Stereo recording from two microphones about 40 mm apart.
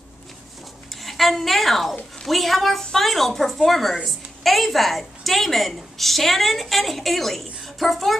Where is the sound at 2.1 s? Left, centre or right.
Centre.